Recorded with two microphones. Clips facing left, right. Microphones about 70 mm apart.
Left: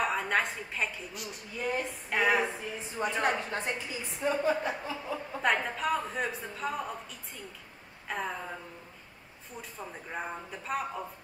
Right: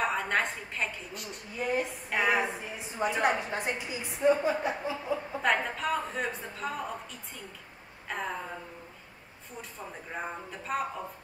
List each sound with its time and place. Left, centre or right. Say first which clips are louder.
0.0 s a woman's voice: even; centre
4.3 s a woman's voice: right 3 dB; centre
4.6 s a woman's voice: right 3 dB; centre
5.4 s a woman's voice: left 1 dB; centre
10.1 s a woman's voice: even; centre